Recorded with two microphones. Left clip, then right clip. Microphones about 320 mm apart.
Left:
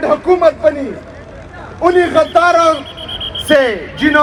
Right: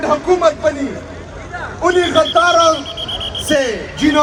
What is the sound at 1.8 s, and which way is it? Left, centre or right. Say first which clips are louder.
Speech: left 2 dB; left.